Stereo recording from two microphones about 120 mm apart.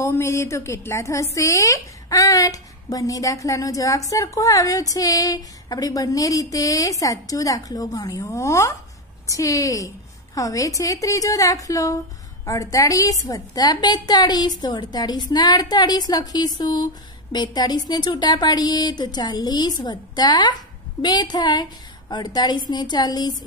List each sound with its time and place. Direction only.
0.0 s a woman's voice: 25° left (ahead or behind)